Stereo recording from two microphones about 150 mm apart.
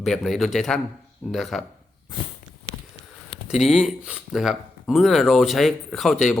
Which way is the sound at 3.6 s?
Centre (ahead or behind).